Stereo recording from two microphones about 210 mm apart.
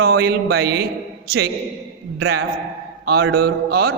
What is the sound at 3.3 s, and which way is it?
Speech, 50° right (ahead or behind).